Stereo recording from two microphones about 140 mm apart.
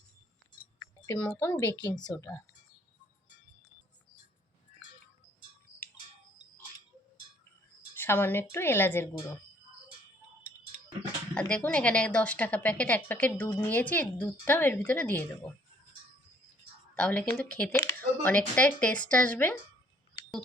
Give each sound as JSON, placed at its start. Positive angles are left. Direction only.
{"t": 1.0, "sound": "a woman's voice", "side_deg": 15}
{"t": 7.9, "sound": "a woman's voice", "side_deg": 15}
{"t": 11.3, "sound": "a woman's voice", "side_deg": 10}
{"t": 16.9, "sound": "a woman's voice", "side_deg": 10}